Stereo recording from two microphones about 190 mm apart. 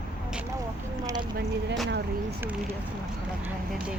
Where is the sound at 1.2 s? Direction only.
55° right (ahead or behind).